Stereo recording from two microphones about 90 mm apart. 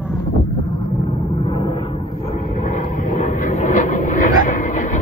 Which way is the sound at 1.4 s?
80° left.